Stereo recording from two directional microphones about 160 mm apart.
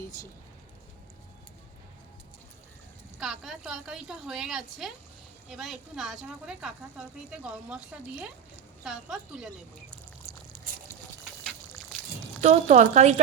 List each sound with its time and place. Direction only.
0.0 s a sound: 20° left (ahead or behind)
3.2 s a woman's voice: centre (ahead or behind)
12.4 s speech: 45° right (ahead or behind)